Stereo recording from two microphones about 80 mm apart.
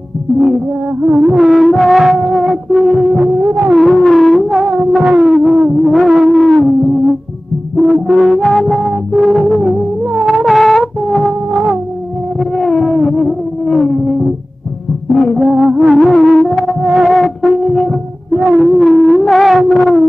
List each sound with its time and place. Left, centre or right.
1.1 s music: centre
3.4 s music: right
3.7 s music: centre
7.7 s music: centre
12.4 s a sound: centre
15.1 s music: centre